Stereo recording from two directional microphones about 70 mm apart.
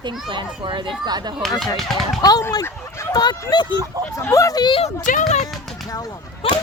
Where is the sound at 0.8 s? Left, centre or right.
Right.